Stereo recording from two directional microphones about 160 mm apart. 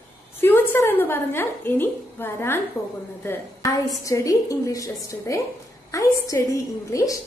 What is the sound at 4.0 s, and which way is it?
A woman's voice, 20° left (ahead or behind).